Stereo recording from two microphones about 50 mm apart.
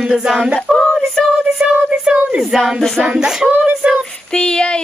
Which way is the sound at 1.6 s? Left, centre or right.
Right.